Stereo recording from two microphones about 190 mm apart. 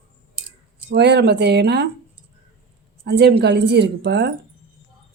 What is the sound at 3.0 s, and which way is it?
Speech, 60° right (ahead or behind).